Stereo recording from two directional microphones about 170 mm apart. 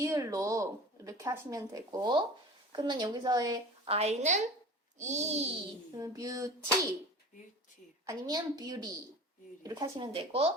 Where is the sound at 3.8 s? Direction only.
35° right (ahead or behind).